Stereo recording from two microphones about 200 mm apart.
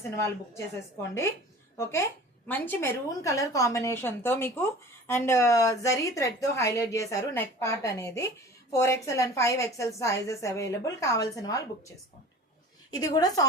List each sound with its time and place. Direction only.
0.0 s a woman's voice: 15° left (ahead or behind)
1.8 s a woman's voice: 15° left (ahead or behind)
12.9 s a woman's voice: 20° left (ahead or behind)